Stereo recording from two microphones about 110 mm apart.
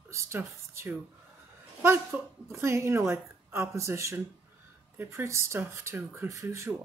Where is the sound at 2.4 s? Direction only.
25° right (ahead or behind).